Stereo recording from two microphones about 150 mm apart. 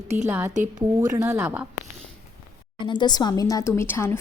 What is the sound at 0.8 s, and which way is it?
Speech, 25° right (ahead or behind).